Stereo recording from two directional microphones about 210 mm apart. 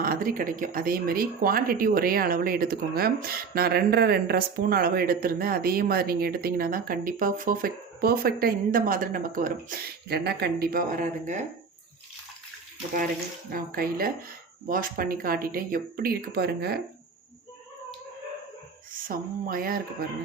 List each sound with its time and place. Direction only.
0.0 s speech: 45° right (ahead or behind)
13.5 s speech: 45° right (ahead or behind)
19.0 s speech: 45° right (ahead or behind)